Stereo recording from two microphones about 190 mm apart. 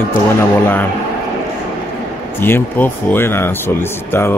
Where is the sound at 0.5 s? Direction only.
10° left (ahead or behind).